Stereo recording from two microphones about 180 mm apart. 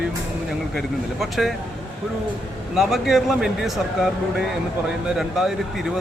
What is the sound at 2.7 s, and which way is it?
Speech, centre (ahead or behind).